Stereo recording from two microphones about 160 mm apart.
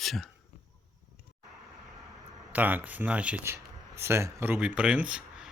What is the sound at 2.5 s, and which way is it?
Speech, 10° right (ahead or behind).